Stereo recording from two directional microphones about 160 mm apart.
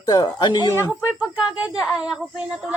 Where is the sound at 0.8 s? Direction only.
5° right (ahead or behind).